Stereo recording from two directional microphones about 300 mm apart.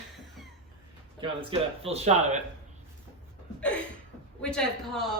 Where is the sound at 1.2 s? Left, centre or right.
Centre.